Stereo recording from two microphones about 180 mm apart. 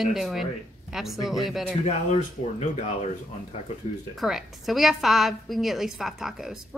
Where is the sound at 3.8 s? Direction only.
35° left (ahead or behind).